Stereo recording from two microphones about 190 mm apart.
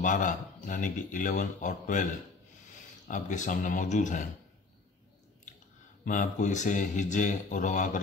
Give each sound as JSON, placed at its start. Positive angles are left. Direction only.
{"t": 0.0, "sound": "speech", "side_deg": 40}
{"t": 3.1, "sound": "speech", "side_deg": 40}
{"t": 6.0, "sound": "speech", "side_deg": 40}